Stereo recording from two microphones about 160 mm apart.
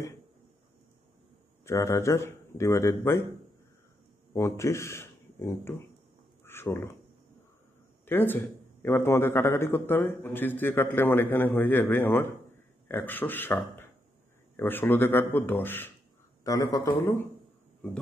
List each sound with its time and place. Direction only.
1.6 s a man's voice: 15° left (ahead or behind)
4.3 s speech: 15° left (ahead or behind)
6.4 s a sound: 15° left (ahead or behind)
8.0 s a man's voice: 15° left (ahead or behind)